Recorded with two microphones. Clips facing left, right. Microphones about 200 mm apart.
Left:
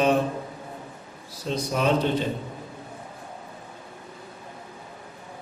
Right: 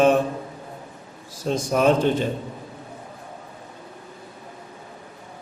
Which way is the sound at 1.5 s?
50° right (ahead or behind).